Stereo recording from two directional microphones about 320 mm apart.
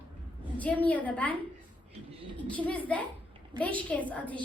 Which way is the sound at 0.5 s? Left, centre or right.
Centre.